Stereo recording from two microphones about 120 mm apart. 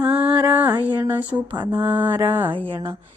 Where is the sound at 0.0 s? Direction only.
10° right (ahead or behind).